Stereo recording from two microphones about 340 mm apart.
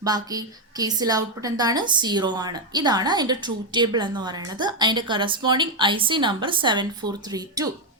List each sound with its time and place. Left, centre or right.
0.0 s a woman's voice: centre